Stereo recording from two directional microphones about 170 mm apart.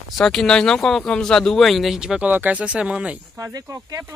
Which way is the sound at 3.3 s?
15° right (ahead or behind).